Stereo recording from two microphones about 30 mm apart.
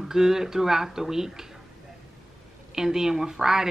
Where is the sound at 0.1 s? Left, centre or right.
Centre.